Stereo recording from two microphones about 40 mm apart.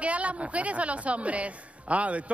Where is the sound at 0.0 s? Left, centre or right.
Right.